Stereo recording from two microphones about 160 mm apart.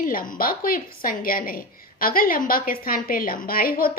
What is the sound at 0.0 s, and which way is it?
A woman's voice, 60° left (ahead or behind).